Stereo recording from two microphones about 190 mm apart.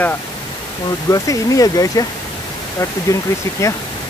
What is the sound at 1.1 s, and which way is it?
Speech, 20° left (ahead or behind).